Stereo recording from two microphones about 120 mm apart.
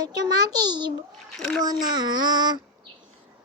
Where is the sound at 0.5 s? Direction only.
35° right (ahead or behind).